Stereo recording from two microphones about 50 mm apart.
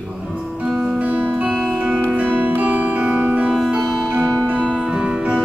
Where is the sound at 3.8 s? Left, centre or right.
Centre.